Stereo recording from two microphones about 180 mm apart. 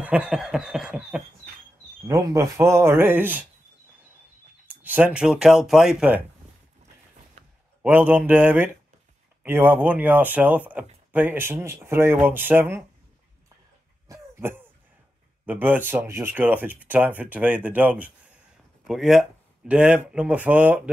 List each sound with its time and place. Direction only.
0.0 s speech: 5° right (ahead or behind)
2.0 s speech: 15° right (ahead or behind)
4.6 s speech: 10° right (ahead or behind)
7.8 s speech: 10° right (ahead or behind)
14.0 s cough: 15° right (ahead or behind)
15.4 s speech: 10° right (ahead or behind)